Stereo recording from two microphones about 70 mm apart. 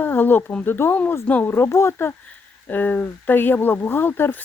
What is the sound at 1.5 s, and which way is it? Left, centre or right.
Speech, left.